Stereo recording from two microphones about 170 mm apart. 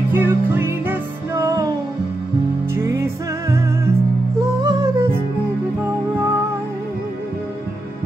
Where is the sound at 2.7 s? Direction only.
15° right (ahead or behind).